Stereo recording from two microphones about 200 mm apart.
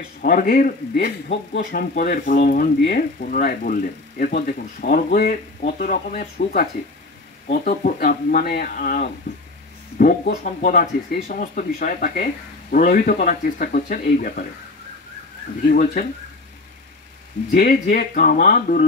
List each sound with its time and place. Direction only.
0.2 s a man's voice: 45° left (ahead or behind)
15.7 s a man's voice: 45° left (ahead or behind)
17.5 s a man's voice: 50° left (ahead or behind)